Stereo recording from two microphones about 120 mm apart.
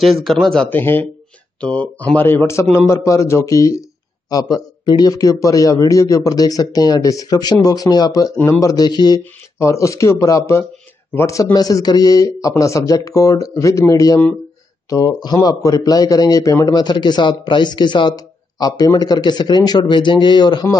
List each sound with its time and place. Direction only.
0.0 s a man's voice: centre (ahead or behind); by 9.2 s 35° left (ahead or behind)
9.2 s a man's voice: 25° left (ahead or behind)